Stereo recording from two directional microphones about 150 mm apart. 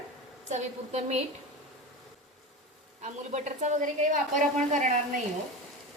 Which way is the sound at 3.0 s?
50° right (ahead or behind).